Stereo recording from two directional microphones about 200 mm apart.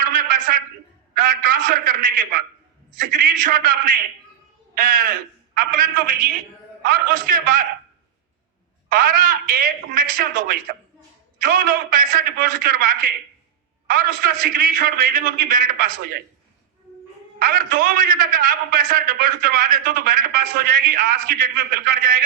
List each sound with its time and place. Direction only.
0.0 s a sound: 40° right (ahead or behind)
1.1 s a man's voice: 45° right (ahead or behind)
8.9 s a man's voice: 45° right (ahead or behind)
17.4 s a man's voice: 45° right (ahead or behind)